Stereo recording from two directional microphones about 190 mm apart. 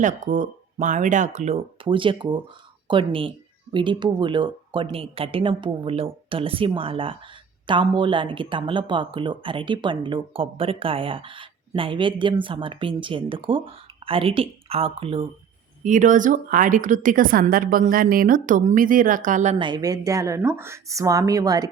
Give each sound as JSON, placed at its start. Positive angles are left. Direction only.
{"t": 0.0, "sound": "speech", "side_deg": -40}
{"t": 15.8, "sound": "a woman's voice", "side_deg": -40}
{"t": 19.5, "sound": "a woman's voice", "side_deg": -25}